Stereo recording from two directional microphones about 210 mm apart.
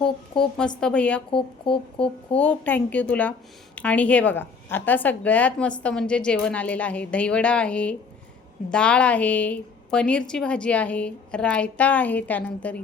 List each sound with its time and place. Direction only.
0.3 s a woman's voice: 5° left (ahead or behind)
1.3 s speech: 25° left (ahead or behind)
2.0 s a woman's voice: 5° left (ahead or behind)